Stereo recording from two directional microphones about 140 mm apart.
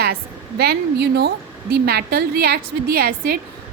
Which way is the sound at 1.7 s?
90° right.